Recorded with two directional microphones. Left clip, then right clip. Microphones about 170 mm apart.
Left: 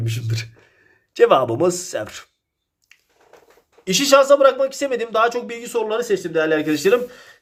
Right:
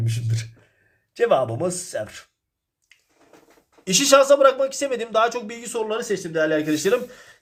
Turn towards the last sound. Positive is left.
turn(degrees=10)  # may be behind; listen again after turning